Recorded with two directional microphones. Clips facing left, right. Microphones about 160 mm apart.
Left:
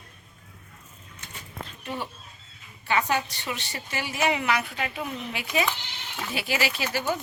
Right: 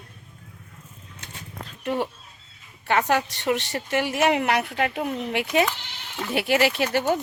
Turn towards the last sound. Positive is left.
turn(degrees=-60)  # may be behind; listen again after turning